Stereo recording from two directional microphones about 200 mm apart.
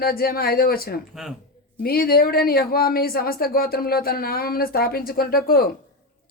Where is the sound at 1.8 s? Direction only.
50° left (ahead or behind).